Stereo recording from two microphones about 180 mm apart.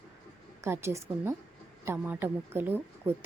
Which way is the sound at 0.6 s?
15° right (ahead or behind).